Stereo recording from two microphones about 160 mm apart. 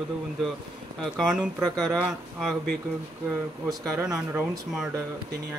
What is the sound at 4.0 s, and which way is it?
Speech, 5° right (ahead or behind).